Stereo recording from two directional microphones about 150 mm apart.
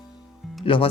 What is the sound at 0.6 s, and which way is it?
Speech, 35° left (ahead or behind).